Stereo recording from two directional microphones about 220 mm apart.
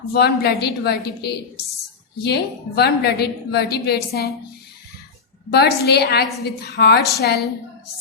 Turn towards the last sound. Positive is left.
turn(degrees=50)  # may be behind; listen again after turning